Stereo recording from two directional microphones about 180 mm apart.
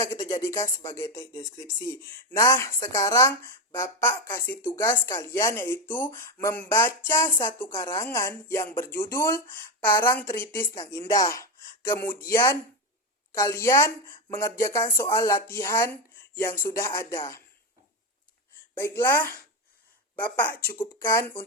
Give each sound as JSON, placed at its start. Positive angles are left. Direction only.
{"t": 0.0, "sound": "speech", "side_deg": 15}
{"t": 18.7, "sound": "speech", "side_deg": 15}